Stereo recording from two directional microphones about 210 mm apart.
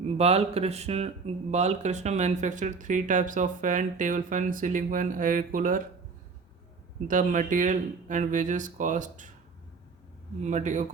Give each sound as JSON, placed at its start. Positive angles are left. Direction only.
{"t": 0.0, "sound": "speech", "side_deg": -30}
{"t": 7.1, "sound": "speech", "side_deg": -40}
{"t": 10.4, "sound": "speech", "side_deg": -35}